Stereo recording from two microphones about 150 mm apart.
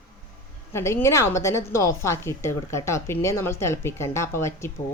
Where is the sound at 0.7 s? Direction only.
15° left (ahead or behind).